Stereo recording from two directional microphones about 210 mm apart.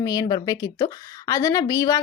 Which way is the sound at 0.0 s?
15° left (ahead or behind).